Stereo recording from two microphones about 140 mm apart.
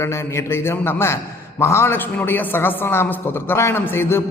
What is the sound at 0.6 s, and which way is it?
A man's voice, 15° left (ahead or behind).